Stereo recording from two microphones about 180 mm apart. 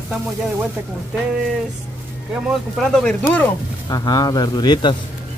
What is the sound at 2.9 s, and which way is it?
Speech, 5° left (ahead or behind).